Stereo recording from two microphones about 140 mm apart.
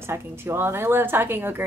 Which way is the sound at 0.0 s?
15° right (ahead or behind).